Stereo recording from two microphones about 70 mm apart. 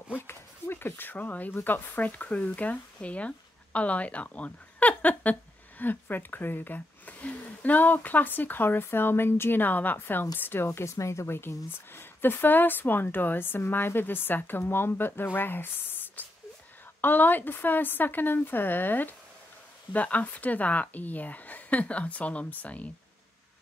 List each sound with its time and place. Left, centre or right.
0.1 s speech: left